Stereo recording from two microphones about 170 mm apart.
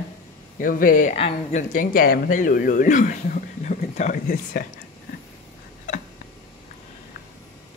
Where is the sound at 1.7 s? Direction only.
55° left (ahead or behind).